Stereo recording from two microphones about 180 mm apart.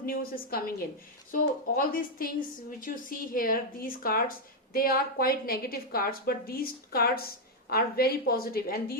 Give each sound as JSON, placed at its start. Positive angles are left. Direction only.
{"t": 0.0, "sound": "a woman's voice", "side_deg": 55}